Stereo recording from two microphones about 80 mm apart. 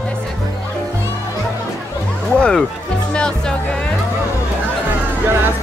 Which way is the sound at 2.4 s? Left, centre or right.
Centre.